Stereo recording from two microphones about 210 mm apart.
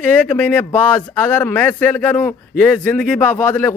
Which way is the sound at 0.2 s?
10° left (ahead or behind).